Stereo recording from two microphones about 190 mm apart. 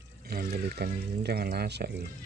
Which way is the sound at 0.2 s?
55° right (ahead or behind).